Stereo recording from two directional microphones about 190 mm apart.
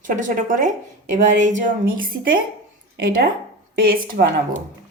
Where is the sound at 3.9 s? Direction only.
50° right (ahead or behind).